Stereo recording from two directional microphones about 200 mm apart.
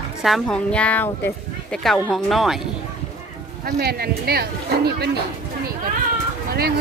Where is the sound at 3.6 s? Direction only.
50° right (ahead or behind).